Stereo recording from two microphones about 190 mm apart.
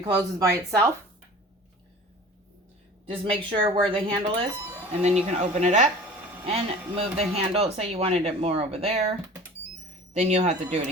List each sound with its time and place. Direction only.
0.0 s speech: 20° right (ahead or behind)
3.1 s speech: 30° right (ahead or behind)
10.2 s speech: 35° right (ahead or behind)